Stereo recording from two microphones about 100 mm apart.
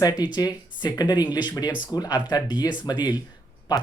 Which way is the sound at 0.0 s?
40° left (ahead or behind).